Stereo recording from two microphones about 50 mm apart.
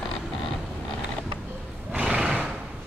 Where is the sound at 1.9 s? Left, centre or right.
Centre.